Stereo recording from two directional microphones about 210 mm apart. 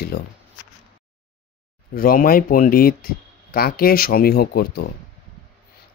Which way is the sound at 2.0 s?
45° left (ahead or behind).